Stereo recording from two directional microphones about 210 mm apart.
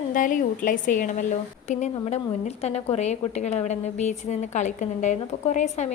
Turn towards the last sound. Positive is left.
turn(degrees=35)  # may be behind; listen again after turning